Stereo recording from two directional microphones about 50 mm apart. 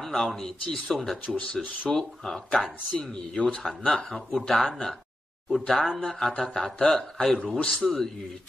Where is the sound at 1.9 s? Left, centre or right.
Centre.